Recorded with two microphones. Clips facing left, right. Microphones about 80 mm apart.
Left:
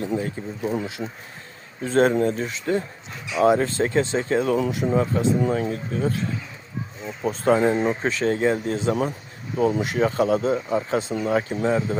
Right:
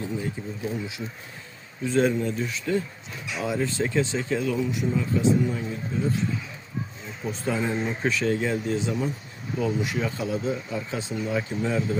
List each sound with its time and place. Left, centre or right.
0.1 s speech: left
2.4 s speech: left
3.3 s speech: left
3.7 s speech: left
4.5 s speech: left
4.8 s speech: left
7.2 s speech: left
8.0 s speech: left
8.9 s speech: left
9.6 s speech: left
11.6 s speech: left